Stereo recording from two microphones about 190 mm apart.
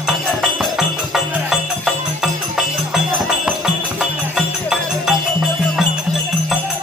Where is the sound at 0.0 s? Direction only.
Centre (ahead or behind).